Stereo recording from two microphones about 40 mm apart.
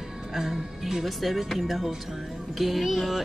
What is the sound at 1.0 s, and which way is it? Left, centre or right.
Speech, centre.